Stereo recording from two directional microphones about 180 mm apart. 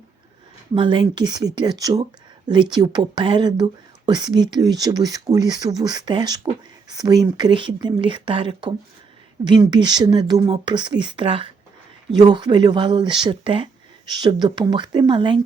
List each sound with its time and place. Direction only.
0.7 s speech: 25° right (ahead or behind)